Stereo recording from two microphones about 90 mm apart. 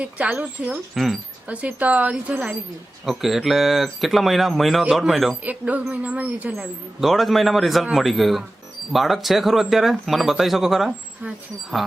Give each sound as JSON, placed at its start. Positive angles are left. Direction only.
{"t": 0.0, "sound": "speech", "side_deg": -15}
{"t": 0.9, "sound": "speech", "side_deg": 0}
{"t": 1.5, "sound": "speech", "side_deg": -15}
{"t": 3.1, "sound": "speech", "side_deg": -5}
{"t": 5.4, "sound": "speech", "side_deg": -15}
{"t": 6.5, "sound": "speech", "side_deg": 0}